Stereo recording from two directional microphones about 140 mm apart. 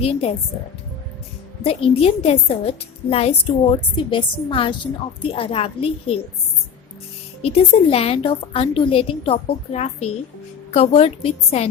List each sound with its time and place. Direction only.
0.0 s a woman's voice: 45° left (ahead or behind)
1.6 s a woman's voice: 45° left (ahead or behind)
7.4 s a woman's voice: 45° left (ahead or behind)